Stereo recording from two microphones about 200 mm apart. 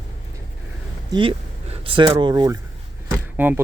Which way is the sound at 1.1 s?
25° right (ahead or behind).